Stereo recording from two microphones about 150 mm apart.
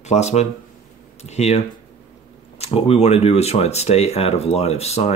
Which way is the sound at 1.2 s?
45° left (ahead or behind).